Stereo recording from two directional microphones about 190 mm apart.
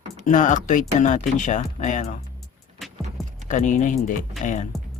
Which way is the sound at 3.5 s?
40° left (ahead or behind).